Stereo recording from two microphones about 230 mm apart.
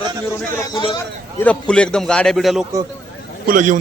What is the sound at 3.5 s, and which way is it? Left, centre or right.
Speech, right.